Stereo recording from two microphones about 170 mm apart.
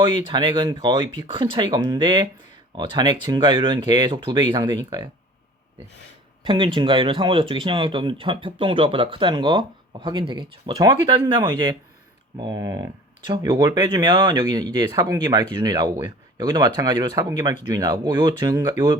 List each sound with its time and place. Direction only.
0.3 s speech: 25° right (ahead or behind)
6.4 s speech: 30° right (ahead or behind)